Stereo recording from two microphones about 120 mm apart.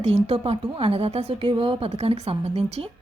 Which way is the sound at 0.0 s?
60° right (ahead or behind).